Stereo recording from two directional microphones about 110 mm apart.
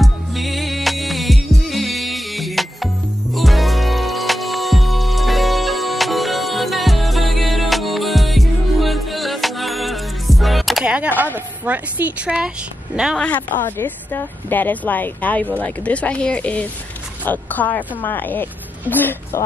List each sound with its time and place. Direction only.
0.0 s music: centre (ahead or behind)
11.3 s a woman's voice: 15° right (ahead or behind)
13.2 s a woman's voice: 15° left (ahead or behind)